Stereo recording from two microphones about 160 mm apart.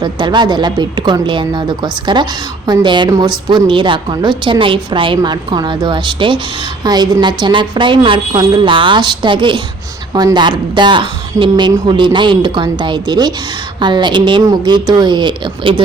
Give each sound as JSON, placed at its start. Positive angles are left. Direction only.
{"t": 0.0, "sound": "a woman's voice", "side_deg": -30}